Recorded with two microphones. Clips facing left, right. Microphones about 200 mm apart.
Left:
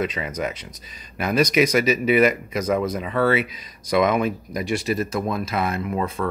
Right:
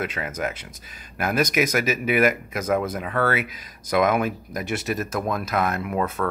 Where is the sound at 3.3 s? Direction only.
50° right (ahead or behind).